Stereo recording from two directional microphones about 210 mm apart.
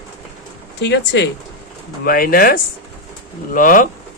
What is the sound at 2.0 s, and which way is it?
Speech, 45° left (ahead or behind).